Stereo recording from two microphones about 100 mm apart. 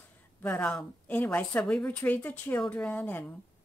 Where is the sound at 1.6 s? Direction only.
10° left (ahead or behind).